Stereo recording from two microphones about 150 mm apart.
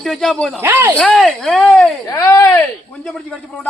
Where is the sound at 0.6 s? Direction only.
15° right (ahead or behind).